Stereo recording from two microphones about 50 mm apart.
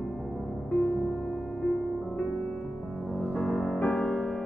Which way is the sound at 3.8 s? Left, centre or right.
Centre.